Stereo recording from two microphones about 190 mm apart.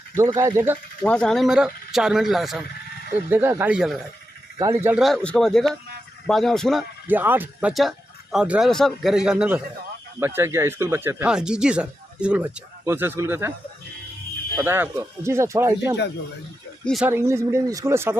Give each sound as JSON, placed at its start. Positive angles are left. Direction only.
{"t": 0.3, "sound": "speech", "side_deg": -15}
{"t": 1.0, "sound": "a man's voice", "side_deg": 5}
{"t": 3.2, "sound": "speech", "side_deg": -10}
{"t": 4.5, "sound": "speech", "side_deg": -15}
{"t": 5.0, "sound": "a man's voice", "side_deg": 5}
{"t": 14.5, "sound": "speech", "side_deg": -10}
{"t": 16.8, "sound": "speech", "side_deg": 0}
{"t": 17.1, "sound": "speech", "side_deg": -15}